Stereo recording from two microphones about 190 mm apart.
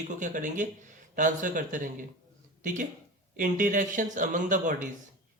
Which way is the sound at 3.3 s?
45° right (ahead or behind).